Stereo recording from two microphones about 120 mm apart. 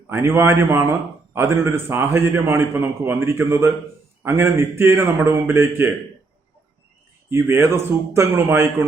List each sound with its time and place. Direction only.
0.1 s a man's voice: 20° right (ahead or behind)
7.3 s a man's voice: 20° right (ahead or behind)